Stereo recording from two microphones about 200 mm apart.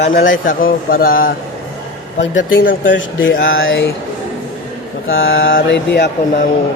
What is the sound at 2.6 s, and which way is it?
Speech, 70° left (ahead or behind).